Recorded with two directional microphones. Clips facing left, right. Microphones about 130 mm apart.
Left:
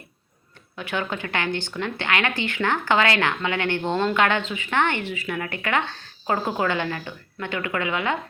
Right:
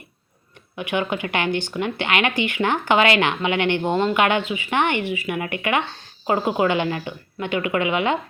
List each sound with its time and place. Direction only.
0.8 s speech: 15° right (ahead or behind)